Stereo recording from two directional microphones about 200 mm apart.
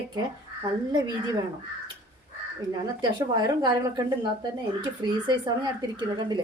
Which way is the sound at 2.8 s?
20° right (ahead or behind).